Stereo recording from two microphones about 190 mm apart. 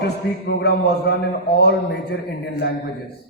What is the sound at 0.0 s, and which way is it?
A man's voice, 60° left (ahead or behind).